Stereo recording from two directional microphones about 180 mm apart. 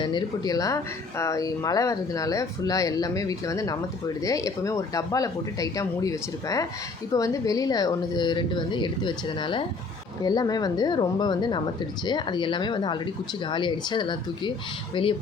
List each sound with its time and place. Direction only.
0.0 s speech: 25° left (ahead or behind)